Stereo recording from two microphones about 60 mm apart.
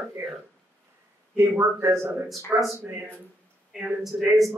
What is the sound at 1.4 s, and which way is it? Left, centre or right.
Speech, right.